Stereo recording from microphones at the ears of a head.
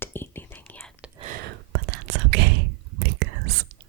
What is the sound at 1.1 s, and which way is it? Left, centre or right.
Whispering, right.